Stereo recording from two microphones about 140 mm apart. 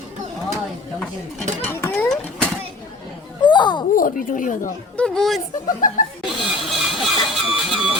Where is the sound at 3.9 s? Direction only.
85° left.